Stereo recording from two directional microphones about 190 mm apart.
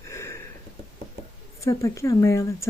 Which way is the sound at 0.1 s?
15° left (ahead or behind).